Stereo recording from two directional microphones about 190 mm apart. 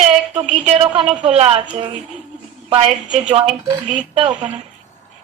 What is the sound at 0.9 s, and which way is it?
A woman's voice, 30° right (ahead or behind).